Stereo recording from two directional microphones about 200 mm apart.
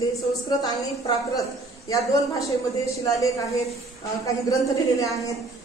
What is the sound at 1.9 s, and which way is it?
Speech, 15° left (ahead or behind).